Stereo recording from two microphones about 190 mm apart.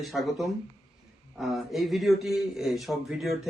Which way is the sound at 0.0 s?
Centre (ahead or behind).